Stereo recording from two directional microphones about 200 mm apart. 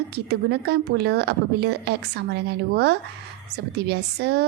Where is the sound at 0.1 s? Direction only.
55° right (ahead or behind).